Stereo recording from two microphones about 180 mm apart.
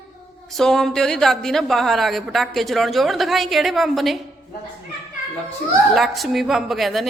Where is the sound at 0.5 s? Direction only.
Centre (ahead or behind).